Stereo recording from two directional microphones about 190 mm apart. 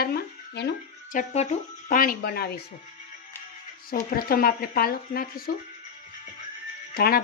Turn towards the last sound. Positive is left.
turn(degrees=55)  # may be behind; listen again after turning